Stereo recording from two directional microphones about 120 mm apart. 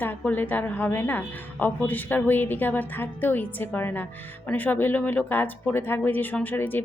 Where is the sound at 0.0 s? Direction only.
15° left (ahead or behind).